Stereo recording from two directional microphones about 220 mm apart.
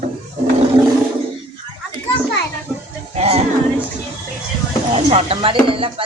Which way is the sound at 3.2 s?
30° right (ahead or behind).